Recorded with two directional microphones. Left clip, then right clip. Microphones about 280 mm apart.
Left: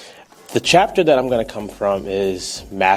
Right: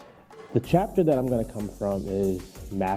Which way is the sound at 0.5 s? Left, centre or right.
Centre.